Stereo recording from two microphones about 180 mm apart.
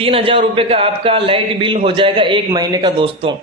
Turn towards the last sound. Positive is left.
turn(degrees=-30)  # may be behind; listen again after turning